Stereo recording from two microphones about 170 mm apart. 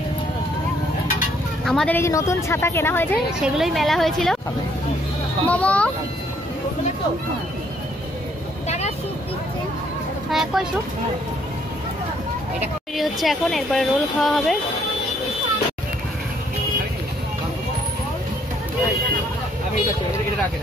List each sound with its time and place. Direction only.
1.6 s speech: centre (ahead or behind)
2.0 s speech: 15° left (ahead or behind)
3.3 s speech: 5° right (ahead or behind)
5.5 s speech: 10° left (ahead or behind)
8.6 s vehicle: 40° left (ahead or behind)
10.3 s speech: centre (ahead or behind)
12.9 s speech: centre (ahead or behind)